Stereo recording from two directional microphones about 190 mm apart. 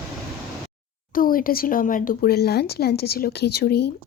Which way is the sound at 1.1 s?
50° left (ahead or behind).